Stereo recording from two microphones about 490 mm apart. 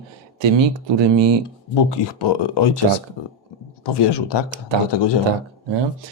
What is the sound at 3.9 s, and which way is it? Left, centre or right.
A man's voice, left.